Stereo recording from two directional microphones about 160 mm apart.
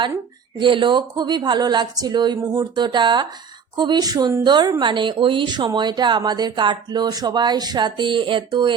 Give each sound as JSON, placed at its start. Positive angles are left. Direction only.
{"t": 0.6, "sound": "speech", "side_deg": -30}